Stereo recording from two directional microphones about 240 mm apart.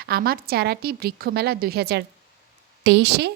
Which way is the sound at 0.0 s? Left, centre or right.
Right.